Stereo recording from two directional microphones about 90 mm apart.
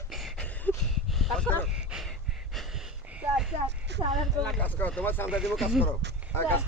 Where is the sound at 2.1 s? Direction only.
Centre (ahead or behind).